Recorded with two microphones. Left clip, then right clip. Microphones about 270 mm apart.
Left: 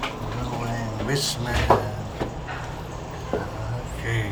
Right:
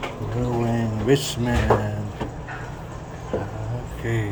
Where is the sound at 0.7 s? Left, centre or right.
Right.